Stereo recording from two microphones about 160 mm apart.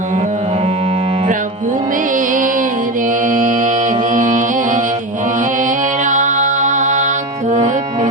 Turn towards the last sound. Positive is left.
turn(degrees=-50)  # may be behind; listen again after turning